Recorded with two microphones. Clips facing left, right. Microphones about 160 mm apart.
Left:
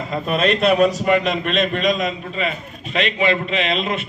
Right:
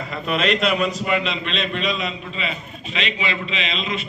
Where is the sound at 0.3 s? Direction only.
40° left (ahead or behind).